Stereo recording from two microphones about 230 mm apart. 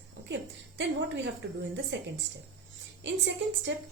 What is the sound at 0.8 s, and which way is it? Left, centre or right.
Speech, right.